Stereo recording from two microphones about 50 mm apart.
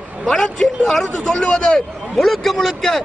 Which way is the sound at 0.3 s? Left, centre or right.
Centre.